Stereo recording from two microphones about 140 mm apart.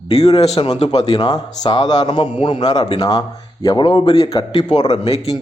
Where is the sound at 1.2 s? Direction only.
30° left (ahead or behind).